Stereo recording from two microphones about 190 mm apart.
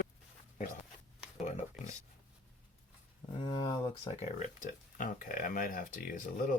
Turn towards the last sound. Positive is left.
turn(degrees=45)  # may be behind; listen again after turning